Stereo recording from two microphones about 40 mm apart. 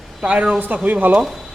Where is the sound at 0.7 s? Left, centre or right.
Right.